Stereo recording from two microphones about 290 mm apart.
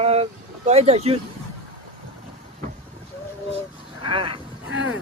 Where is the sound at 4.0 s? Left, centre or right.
Centre.